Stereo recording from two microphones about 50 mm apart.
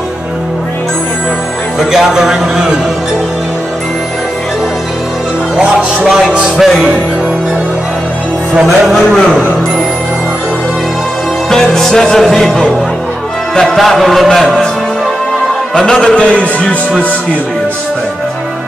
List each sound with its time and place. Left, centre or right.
1.8 s speech: centre
5.6 s music: right
8.6 s music: centre
11.5 s music: centre
15.7 s music: centre; by 16.6 s left